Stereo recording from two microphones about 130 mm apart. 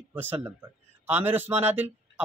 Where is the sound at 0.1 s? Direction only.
15° right (ahead or behind).